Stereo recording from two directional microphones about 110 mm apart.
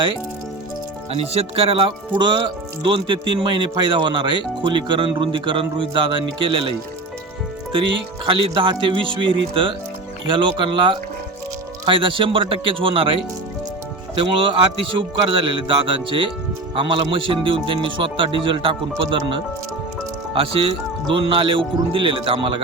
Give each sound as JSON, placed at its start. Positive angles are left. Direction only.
{"t": 1.1, "sound": "speech", "side_deg": -65}
{"t": 7.7, "sound": "speech", "side_deg": -50}
{"t": 14.2, "sound": "speech", "side_deg": -50}
{"t": 20.3, "sound": "speech", "side_deg": -55}